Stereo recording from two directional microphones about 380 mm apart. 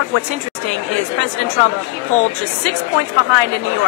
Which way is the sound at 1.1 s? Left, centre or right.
Right.